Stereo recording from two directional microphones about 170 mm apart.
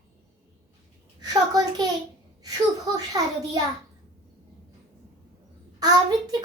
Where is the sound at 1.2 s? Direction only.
20° right (ahead or behind).